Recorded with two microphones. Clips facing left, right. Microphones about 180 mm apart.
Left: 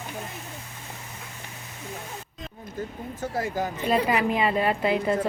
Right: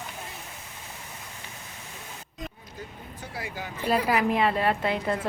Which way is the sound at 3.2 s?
45° left (ahead or behind).